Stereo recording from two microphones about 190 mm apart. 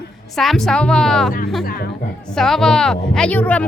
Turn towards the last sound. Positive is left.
turn(degrees=10)  # may be behind; listen again after turning